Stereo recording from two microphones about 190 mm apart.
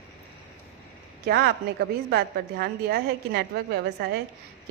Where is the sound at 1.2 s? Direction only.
60° right (ahead or behind).